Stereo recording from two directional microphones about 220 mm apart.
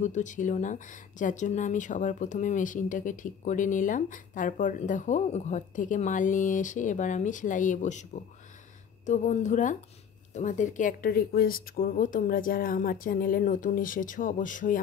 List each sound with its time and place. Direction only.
0.0 s speech: 35° left (ahead or behind)
9.0 s speech: 30° left (ahead or behind)